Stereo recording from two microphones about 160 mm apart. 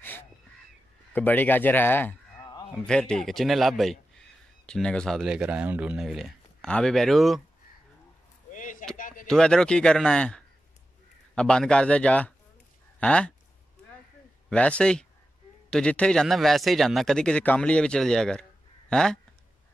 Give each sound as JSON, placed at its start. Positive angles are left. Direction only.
{"t": 1.1, "sound": "a man's voice", "side_deg": 10}
{"t": 2.4, "sound": "a sound", "side_deg": 25}
{"t": 2.7, "sound": "speech", "side_deg": 5}
{"t": 8.5, "sound": "a sound", "side_deg": 55}
{"t": 9.3, "sound": "a man's voice", "side_deg": 5}
{"t": 14.5, "sound": "a man's voice", "side_deg": 5}